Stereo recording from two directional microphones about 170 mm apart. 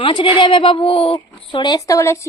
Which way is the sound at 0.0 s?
30° left (ahead or behind).